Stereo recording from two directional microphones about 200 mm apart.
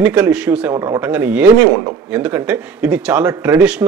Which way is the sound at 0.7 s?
15° right (ahead or behind).